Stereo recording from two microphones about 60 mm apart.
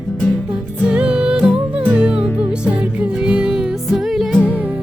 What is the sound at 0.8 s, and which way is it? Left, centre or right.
Music, centre.